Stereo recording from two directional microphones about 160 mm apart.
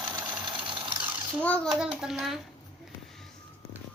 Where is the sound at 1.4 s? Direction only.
10° left (ahead or behind).